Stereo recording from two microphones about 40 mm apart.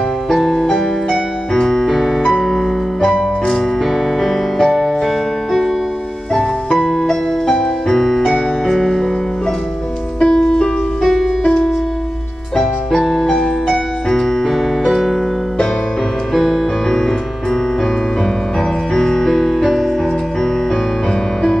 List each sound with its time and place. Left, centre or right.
0.3 s music: centre
1.5 s keyboard: centre
2.0 s music: centre
3.0 s keyboard: centre
7.0 s music: centre
10.2 s music: centre
11.0 s music: centre
12.9 s keyboard: centre
18.9 s music: centre